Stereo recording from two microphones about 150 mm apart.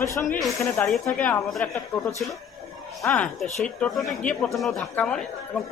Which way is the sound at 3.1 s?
5° left (ahead or behind).